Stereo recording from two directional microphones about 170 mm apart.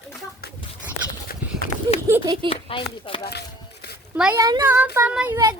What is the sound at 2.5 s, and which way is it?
Speech, 30° left (ahead or behind).